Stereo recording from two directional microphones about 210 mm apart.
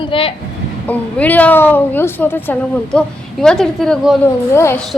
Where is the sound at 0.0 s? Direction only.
25° left (ahead or behind).